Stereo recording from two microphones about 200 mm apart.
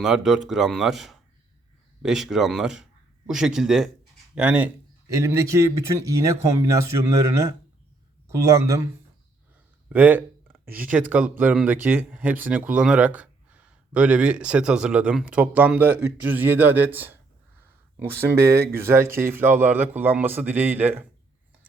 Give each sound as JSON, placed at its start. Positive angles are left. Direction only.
{"t": 0.0, "sound": "speech", "side_deg": 0}
{"t": 9.9, "sound": "speech", "side_deg": -10}